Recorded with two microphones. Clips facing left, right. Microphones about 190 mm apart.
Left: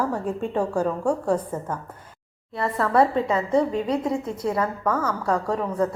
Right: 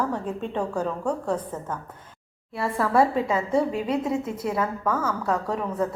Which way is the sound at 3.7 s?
25° left (ahead or behind).